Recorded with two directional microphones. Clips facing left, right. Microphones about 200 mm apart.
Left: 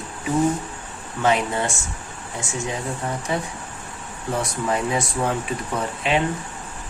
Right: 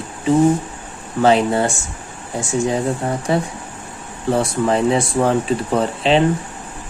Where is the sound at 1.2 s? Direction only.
35° right (ahead or behind).